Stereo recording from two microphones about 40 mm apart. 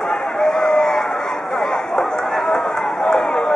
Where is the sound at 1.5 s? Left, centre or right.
Centre.